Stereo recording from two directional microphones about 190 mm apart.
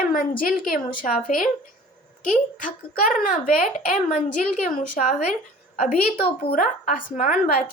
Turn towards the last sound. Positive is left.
turn(degrees=45)  # may be behind; listen again after turning